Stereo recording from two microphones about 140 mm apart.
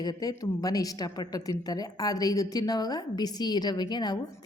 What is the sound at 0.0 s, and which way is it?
A woman's voice, 25° left (ahead or behind).